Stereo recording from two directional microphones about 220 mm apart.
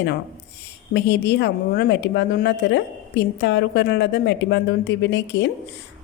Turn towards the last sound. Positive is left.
turn(degrees=55)  # may be behind; listen again after turning